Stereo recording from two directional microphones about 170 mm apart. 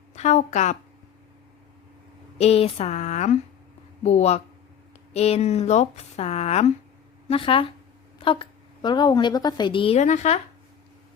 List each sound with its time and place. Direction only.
0.2 s a woman's voice: 45° left (ahead or behind)
2.4 s a woman's voice: 35° left (ahead or behind)